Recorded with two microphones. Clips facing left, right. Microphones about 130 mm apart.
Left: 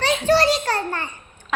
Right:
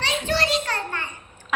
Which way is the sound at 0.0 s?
40° left (ahead or behind).